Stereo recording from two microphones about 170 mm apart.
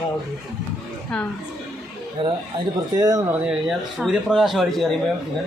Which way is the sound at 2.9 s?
20° right (ahead or behind).